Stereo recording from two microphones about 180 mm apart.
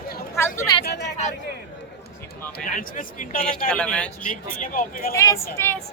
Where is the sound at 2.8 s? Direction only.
50° left (ahead or behind).